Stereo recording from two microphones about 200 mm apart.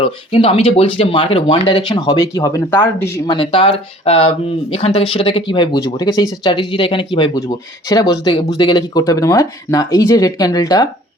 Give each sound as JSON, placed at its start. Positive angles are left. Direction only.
{"t": 0.0, "sound": "speech", "side_deg": 25}
{"t": 3.3, "sound": "speech", "side_deg": 25}